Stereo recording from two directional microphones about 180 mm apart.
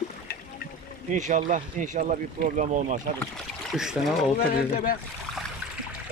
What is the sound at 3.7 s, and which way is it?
Speech, centre (ahead or behind).